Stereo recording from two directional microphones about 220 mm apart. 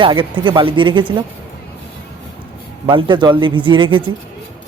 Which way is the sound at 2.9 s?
20° right (ahead or behind).